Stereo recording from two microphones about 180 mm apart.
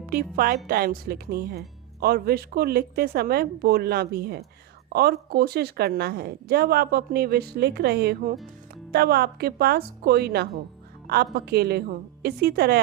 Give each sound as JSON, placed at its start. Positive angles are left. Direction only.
{"t": 0.1, "sound": "speech", "side_deg": -55}